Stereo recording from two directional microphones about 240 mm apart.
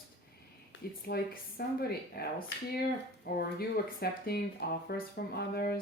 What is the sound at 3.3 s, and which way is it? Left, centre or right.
Speech, left.